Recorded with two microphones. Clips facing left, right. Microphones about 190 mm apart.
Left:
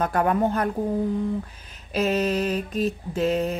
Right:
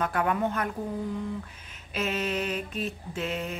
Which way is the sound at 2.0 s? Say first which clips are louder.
Left 7 dB; 40° left (ahead or behind).